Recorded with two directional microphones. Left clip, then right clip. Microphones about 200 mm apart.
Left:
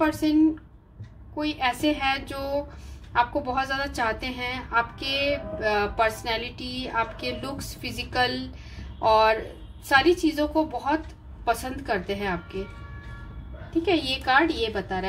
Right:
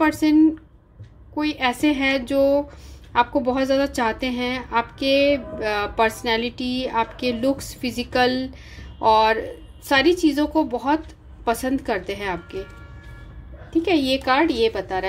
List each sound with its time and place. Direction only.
0.0 s a woman's voice: 45° right (ahead or behind)
13.8 s a woman's voice: 45° right (ahead or behind)